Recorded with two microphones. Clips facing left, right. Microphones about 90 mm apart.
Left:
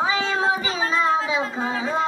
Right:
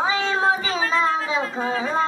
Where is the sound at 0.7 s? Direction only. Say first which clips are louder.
Even; 20° left (ahead or behind).